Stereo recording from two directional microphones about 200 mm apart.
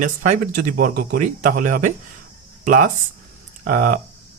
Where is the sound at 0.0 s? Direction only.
40° right (ahead or behind).